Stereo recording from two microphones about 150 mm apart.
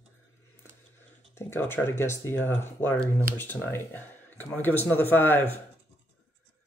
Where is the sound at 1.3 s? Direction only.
15° left (ahead or behind).